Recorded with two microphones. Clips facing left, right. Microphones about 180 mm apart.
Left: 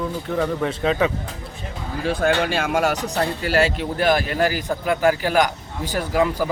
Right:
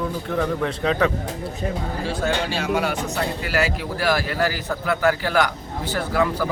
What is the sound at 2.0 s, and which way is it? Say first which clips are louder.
Speech: left 5 dB; 55° left (ahead or behind).